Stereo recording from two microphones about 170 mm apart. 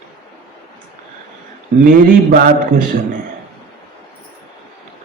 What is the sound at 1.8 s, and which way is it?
A man's voice, 60° right (ahead or behind).